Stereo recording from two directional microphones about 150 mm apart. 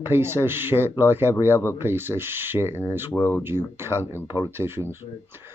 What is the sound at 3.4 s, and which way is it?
Speech, 15° right (ahead or behind).